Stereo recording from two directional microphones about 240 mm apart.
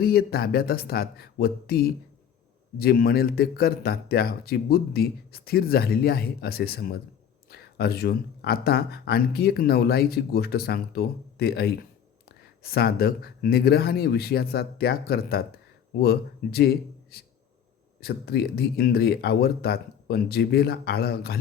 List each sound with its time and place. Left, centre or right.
0.0 s speech: left